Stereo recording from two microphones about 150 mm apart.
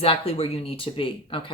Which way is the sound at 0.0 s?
40° left (ahead or behind).